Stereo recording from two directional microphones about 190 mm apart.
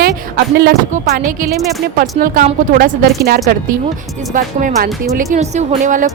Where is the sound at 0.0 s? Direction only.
55° right (ahead or behind).